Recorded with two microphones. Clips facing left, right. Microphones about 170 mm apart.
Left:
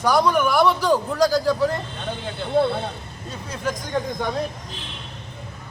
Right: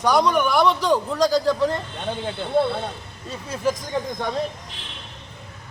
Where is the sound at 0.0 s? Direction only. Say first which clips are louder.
Even; centre (ahead or behind).